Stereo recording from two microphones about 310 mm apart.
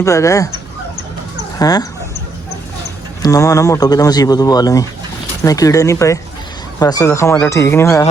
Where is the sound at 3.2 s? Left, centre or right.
Centre.